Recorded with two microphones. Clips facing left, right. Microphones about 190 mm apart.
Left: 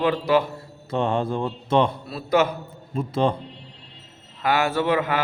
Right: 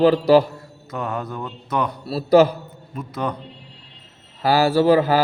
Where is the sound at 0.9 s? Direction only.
30° left (ahead or behind).